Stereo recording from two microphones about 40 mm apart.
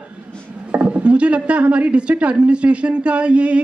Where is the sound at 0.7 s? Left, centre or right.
Right.